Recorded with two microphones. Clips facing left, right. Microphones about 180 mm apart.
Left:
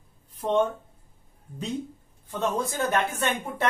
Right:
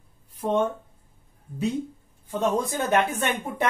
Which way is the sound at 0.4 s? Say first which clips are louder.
Even; 10° right (ahead or behind).